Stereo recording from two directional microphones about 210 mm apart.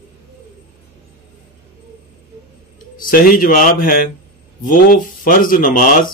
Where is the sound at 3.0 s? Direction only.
40° left (ahead or behind).